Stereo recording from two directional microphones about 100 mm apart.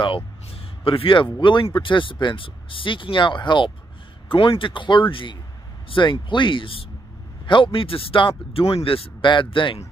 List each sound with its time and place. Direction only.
0.0 s speech: 60° left (ahead or behind)